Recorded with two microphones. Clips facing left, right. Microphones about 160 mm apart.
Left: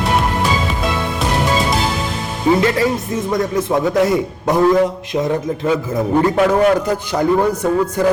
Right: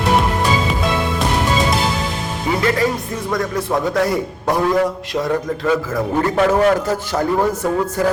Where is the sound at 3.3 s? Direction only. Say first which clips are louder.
Left 2 dB; 20° left (ahead or behind).